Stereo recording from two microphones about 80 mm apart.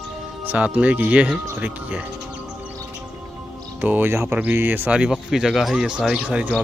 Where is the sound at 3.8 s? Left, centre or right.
Right.